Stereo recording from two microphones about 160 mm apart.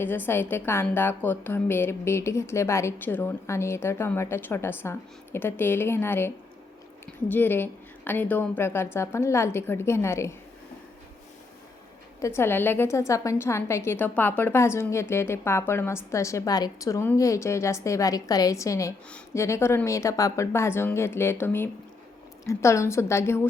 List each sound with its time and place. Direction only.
0.0 s a woman's voice: 10° left (ahead or behind)
12.2 s a woman's voice: 15° left (ahead or behind)